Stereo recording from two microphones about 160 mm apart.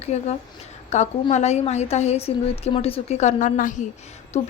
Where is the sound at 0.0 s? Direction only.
45° left (ahead or behind).